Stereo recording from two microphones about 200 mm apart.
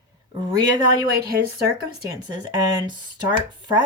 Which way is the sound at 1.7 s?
20° right (ahead or behind).